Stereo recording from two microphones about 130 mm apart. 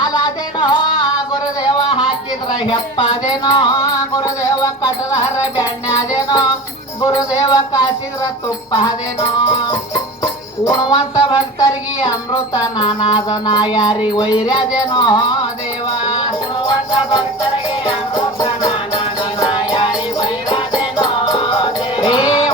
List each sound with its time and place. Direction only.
0.0 s music: 30° left (ahead or behind)